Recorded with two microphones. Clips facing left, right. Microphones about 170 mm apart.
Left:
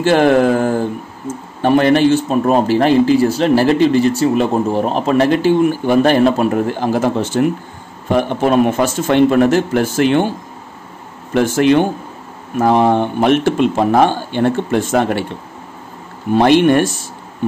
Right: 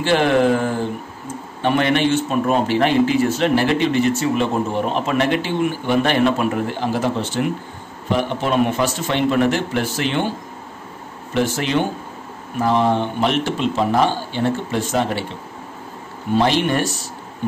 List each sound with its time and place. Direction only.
0.0 s a man's voice: 45° left (ahead or behind)
11.3 s speech: 50° left (ahead or behind)
16.3 s speech: 55° left (ahead or behind)